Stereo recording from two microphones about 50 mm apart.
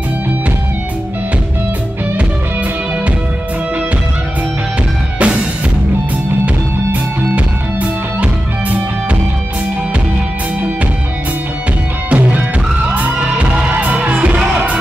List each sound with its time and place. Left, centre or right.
5.2 s music: right
12.1 s music: right